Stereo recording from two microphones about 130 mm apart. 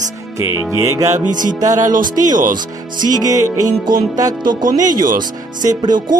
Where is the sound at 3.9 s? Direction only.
90° right.